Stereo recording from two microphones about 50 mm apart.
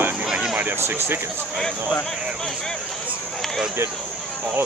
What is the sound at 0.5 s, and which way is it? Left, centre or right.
Speech, right.